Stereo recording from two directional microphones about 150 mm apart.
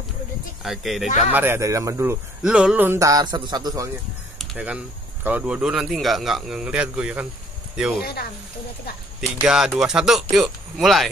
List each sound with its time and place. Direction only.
0.7 s speech: centre (ahead or behind)
1.0 s speech: 50° left (ahead or behind)
1.3 s speech: 15° right (ahead or behind)
2.4 s a man's voice: 5° right (ahead or behind); by 3.9 s 25° right (ahead or behind)
4.4 s speech: 10° right (ahead or behind)
8.0 s speech: 90° left
9.2 s speech: 5° right (ahead or behind)